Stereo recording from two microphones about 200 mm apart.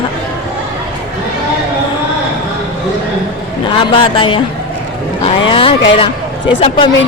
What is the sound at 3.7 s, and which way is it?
Speech, 25° left (ahead or behind).